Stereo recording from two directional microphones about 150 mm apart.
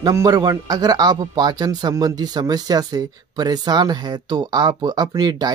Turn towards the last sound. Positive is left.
turn(degrees=-25)  # may be behind; listen again after turning